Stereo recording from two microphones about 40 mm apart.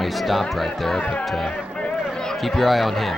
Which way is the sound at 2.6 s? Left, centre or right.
Centre.